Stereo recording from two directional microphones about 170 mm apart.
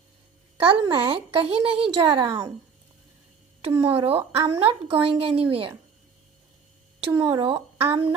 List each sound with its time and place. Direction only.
0.5 s speech: 30° right (ahead or behind)
3.8 s speech: 35° right (ahead or behind)
7.0 s speech: 30° right (ahead or behind)